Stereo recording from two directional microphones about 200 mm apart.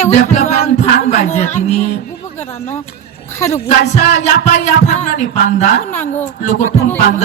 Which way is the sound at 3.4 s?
10° left (ahead or behind).